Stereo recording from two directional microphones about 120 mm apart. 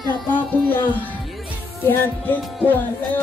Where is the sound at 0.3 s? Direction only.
15° left (ahead or behind).